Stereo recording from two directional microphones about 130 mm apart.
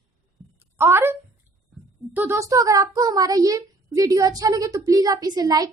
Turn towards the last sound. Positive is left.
turn(degrees=-30)  # may be behind; listen again after turning